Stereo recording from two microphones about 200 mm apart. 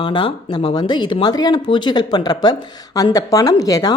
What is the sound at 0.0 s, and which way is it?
A woman's voice, 25° left (ahead or behind).